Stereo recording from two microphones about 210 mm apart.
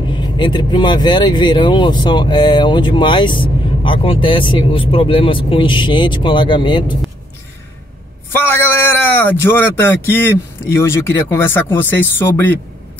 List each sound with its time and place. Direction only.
0.2 s speech: 20° left (ahead or behind)
8.3 s a man's voice: 10° left (ahead or behind)